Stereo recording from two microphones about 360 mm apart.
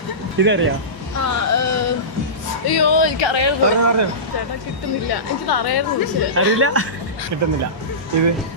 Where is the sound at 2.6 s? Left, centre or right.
Left.